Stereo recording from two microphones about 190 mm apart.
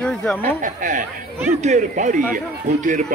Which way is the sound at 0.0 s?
5° left (ahead or behind).